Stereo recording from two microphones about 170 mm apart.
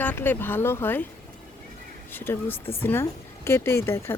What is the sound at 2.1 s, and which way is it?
Speech, 10° left (ahead or behind).